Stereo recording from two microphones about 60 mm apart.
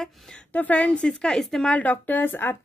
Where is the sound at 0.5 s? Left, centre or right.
Left.